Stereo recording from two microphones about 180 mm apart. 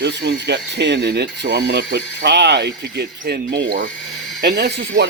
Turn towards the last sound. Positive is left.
turn(degrees=-65)  # may be behind; listen again after turning